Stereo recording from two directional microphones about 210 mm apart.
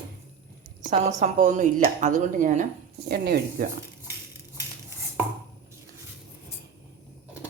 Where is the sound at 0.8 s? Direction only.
35° right (ahead or behind).